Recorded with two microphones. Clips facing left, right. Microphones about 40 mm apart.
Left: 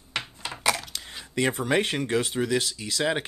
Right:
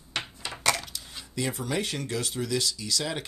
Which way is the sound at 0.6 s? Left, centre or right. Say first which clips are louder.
Left 1 dB; centre.